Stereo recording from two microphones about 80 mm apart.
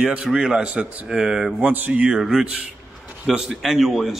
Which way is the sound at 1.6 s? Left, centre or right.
Centre.